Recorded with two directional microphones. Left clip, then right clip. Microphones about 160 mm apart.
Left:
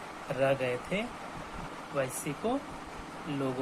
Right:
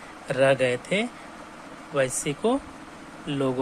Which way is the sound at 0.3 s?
45° right (ahead or behind).